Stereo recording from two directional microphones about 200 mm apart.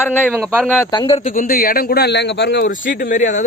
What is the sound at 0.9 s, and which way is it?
Speech, 25° left (ahead or behind).